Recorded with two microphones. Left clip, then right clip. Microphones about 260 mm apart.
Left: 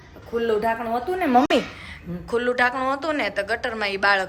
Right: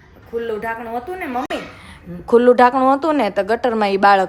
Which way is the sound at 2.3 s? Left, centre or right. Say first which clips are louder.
Right 10 dB; centre.